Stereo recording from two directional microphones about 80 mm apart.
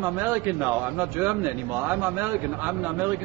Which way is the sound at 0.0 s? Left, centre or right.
Right.